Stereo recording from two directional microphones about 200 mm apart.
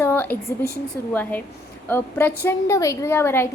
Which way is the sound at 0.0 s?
10° left (ahead or behind).